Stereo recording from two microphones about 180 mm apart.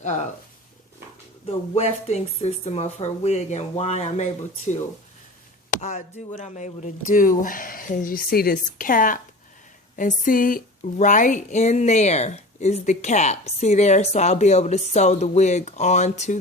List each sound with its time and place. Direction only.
0.0 s speech: 40° left (ahead or behind)
1.5 s speech: 35° left (ahead or behind)
5.8 s speech: 40° left (ahead or behind)